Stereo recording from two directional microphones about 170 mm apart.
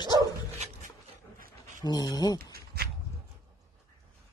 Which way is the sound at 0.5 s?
40° right (ahead or behind).